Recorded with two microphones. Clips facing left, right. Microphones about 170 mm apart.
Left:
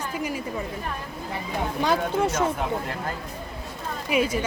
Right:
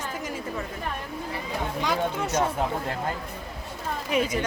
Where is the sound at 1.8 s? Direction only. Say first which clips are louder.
Left 5 dB; 30° left (ahead or behind).